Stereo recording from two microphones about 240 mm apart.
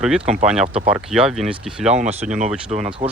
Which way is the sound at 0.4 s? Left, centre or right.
Centre.